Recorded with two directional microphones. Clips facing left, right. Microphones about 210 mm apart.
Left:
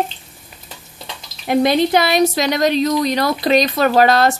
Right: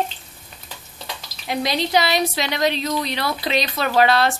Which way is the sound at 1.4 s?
50° left (ahead or behind).